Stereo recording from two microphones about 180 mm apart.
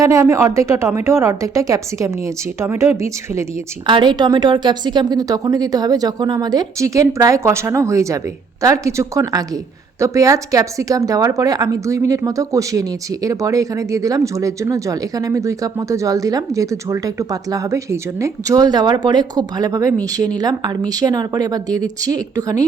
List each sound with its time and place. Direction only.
0.0 s a woman's voice: 15° right (ahead or behind)
3.8 s a woman's voice: 25° right (ahead or behind)